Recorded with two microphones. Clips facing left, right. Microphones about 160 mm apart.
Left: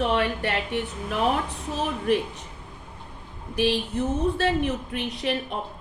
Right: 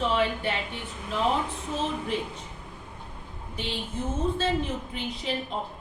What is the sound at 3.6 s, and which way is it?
A woman's voice, 70° left (ahead or behind).